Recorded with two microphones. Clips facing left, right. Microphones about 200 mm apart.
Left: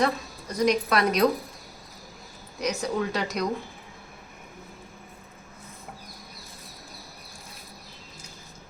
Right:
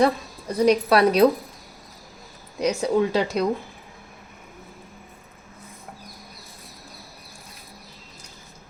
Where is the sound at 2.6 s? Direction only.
30° right (ahead or behind).